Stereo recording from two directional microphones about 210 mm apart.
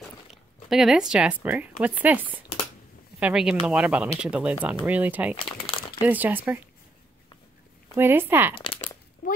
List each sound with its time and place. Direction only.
0.7 s speech: centre (ahead or behind)
5.3 s speech: 25° left (ahead or behind)
6.0 s speech: 10° right (ahead or behind)
7.9 s speech: 10° right (ahead or behind)
8.6 s crumpling: 25° left (ahead or behind)
9.2 s speech: 40° left (ahead or behind)